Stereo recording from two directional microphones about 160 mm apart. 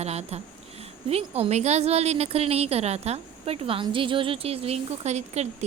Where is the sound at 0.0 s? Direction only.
40° right (ahead or behind).